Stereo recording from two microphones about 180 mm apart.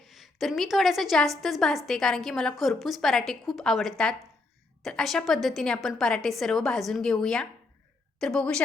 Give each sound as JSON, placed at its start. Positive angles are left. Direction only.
{"t": 0.0, "sound": "a woman's voice", "side_deg": 0}